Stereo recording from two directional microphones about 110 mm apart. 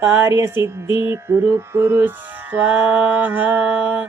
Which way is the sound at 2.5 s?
15° right (ahead or behind).